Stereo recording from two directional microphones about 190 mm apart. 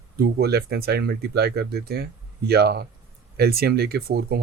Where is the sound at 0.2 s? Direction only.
55° right (ahead or behind).